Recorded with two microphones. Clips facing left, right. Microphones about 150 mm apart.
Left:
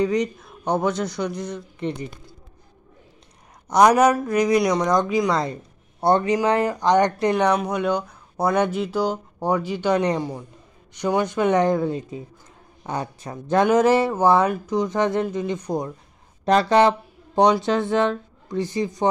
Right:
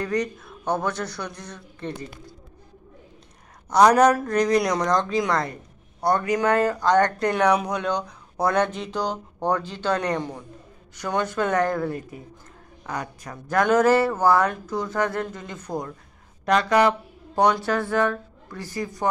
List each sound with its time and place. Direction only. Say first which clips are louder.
0.0 s speech: left 4 dB; 15° left (ahead or behind)
3.7 s speech: left 1 dB; 10° left (ahead or behind)
5.4 s speech: left 3 dB; 25° left (ahead or behind)
7.6 s speech: left 3 dB; 5° left (ahead or behind)
16.4 s speech: left 3 dB; 30° left (ahead or behind)